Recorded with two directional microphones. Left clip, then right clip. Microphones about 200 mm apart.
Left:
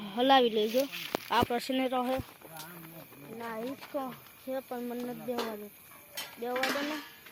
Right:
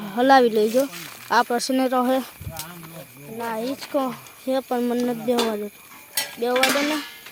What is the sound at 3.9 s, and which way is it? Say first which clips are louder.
Speech: right 13 dB; 35° right (ahead or behind).